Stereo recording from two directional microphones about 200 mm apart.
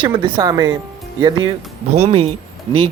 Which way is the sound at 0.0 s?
25° right (ahead or behind).